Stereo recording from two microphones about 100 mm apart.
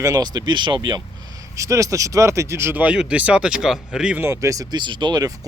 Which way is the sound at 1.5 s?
35° right (ahead or behind).